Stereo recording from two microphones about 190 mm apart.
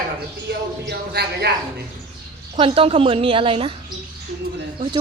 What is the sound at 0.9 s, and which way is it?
Speech, 60° right (ahead or behind).